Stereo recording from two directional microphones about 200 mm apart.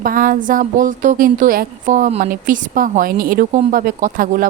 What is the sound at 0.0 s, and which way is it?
A woman's voice, 45° right (ahead or behind).